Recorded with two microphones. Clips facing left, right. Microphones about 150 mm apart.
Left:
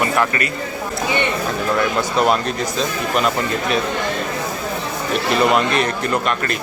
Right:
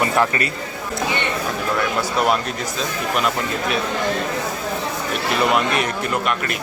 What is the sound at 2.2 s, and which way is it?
Speech, 5° right (ahead or behind).